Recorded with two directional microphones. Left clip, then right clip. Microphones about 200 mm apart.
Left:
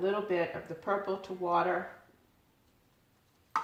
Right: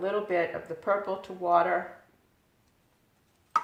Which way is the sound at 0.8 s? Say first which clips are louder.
Right 4 dB; 35° right (ahead or behind).